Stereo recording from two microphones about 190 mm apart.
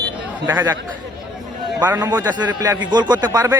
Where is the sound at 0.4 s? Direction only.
10° right (ahead or behind).